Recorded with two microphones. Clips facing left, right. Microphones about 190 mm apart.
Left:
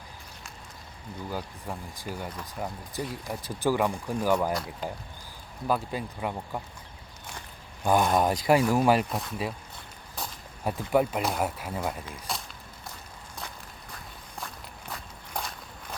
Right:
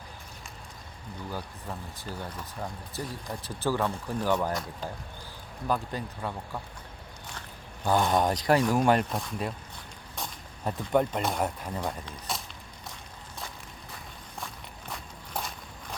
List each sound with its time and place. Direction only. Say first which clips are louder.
1.3 s speech: left 2 dB; 10° left (ahead or behind)
8.0 s speech: left 1 dB; 5° left (ahead or behind)
14.3 s walk: left 1 dB; centre (ahead or behind)